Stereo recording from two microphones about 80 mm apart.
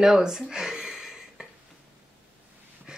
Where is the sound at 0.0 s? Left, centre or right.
Centre.